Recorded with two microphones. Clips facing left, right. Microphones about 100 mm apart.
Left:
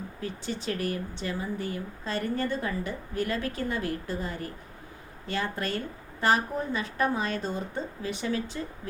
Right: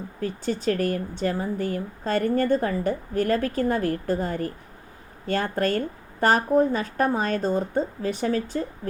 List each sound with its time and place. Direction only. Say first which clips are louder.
0.2 s speech: right 8 dB; 45° right (ahead or behind)